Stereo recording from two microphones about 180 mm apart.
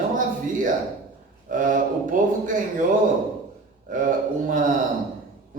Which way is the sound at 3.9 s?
50° right (ahead or behind).